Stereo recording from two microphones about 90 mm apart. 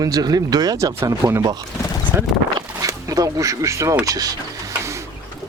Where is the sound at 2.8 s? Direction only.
40° right (ahead or behind).